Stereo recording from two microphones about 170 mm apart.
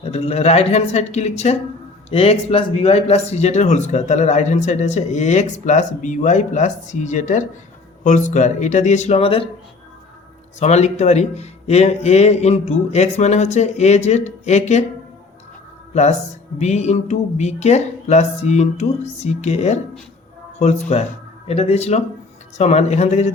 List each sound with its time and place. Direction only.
0.0 s speech: 40° left (ahead or behind)
10.6 s speech: 40° left (ahead or behind)
16.6 s speech: 40° left (ahead or behind)